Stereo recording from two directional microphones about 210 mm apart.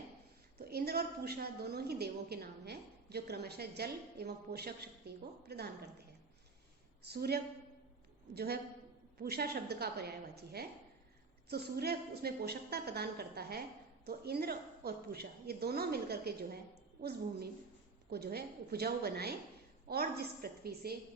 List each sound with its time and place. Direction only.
0.6 s a woman's voice: 45° right (ahead or behind)
7.1 s a woman's voice: 50° right (ahead or behind)